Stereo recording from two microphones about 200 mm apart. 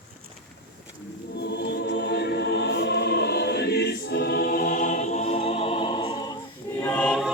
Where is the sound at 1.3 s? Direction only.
55° left (ahead or behind); by 6.3 s 25° left (ahead or behind).